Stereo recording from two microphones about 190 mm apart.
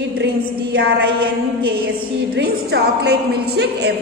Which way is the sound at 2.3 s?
60° right (ahead or behind).